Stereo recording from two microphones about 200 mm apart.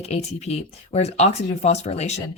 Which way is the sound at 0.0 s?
35° left (ahead or behind).